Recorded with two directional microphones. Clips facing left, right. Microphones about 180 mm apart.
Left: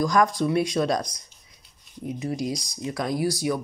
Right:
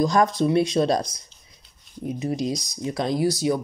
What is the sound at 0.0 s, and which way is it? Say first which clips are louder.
Speech: right 2 dB; 25° right (ahead or behind).